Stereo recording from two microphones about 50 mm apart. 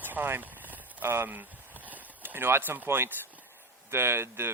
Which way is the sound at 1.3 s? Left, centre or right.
Right.